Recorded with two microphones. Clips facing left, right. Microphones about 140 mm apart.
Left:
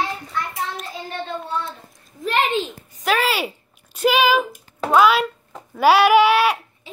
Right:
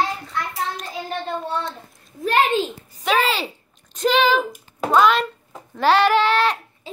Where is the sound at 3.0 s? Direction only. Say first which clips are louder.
Even; 5° left (ahead or behind).